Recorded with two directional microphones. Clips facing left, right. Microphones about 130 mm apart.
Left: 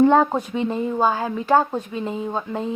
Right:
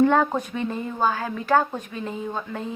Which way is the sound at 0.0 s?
25° left (ahead or behind).